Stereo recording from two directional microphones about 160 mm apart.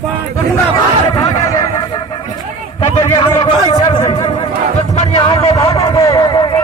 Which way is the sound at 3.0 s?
30° left (ahead or behind).